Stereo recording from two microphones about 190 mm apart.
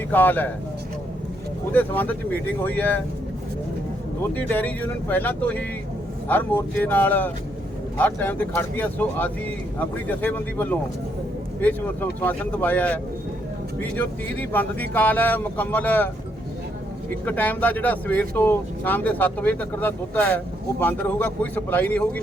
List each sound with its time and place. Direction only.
0.1 s speech: 10° left (ahead or behind)
1.7 s speech: 10° left (ahead or behind)
4.4 s speech: 10° left (ahead or behind)
17.2 s speech: 10° left (ahead or behind)